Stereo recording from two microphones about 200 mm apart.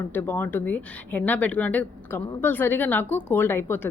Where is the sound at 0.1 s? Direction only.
10° left (ahead or behind).